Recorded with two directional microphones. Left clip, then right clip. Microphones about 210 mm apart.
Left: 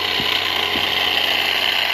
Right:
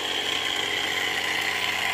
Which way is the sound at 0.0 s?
40° left (ahead or behind).